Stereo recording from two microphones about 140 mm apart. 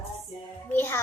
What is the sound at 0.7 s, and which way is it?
Speech, 15° left (ahead or behind).